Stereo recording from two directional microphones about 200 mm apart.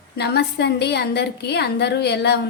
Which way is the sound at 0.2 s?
55° left (ahead or behind).